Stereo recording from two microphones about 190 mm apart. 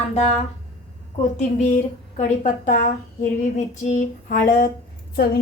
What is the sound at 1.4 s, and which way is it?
A woman's voice, 40° left (ahead or behind).